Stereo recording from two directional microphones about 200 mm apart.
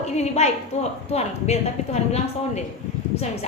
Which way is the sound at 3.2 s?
35° left (ahead or behind).